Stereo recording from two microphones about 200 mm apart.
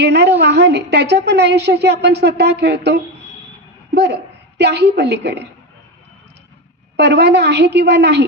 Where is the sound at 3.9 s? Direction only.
55° right (ahead or behind).